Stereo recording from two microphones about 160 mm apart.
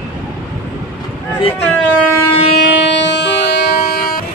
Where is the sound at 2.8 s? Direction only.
90° left.